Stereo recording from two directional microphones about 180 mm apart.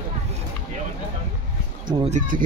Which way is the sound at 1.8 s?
25° right (ahead or behind).